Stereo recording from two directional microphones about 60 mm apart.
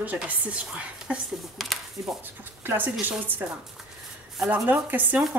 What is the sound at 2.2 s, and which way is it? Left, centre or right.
Speech, right.